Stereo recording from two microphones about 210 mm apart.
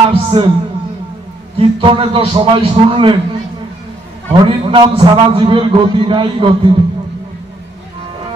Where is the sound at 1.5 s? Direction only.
25° right (ahead or behind).